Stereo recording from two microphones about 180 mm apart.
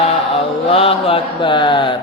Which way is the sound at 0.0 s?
30° left (ahead or behind).